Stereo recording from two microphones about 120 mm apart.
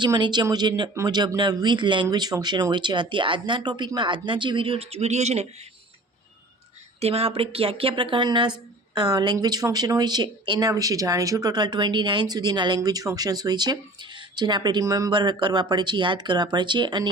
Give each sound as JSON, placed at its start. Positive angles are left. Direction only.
{"t": 0.0, "sound": "speech", "side_deg": -40}
{"t": 7.0, "sound": "a woman's voice", "side_deg": -55}